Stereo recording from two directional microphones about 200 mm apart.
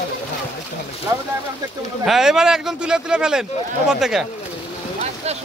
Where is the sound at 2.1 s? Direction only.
5° right (ahead or behind).